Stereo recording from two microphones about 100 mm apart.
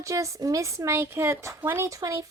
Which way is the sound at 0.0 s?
35° right (ahead or behind).